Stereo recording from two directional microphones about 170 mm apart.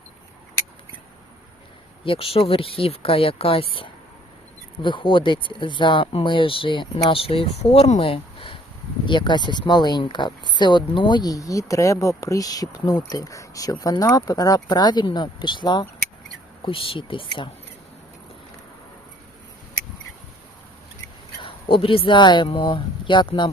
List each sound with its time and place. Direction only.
2.0 s speech: 35° left (ahead or behind)
21.4 s speech: 30° left (ahead or behind)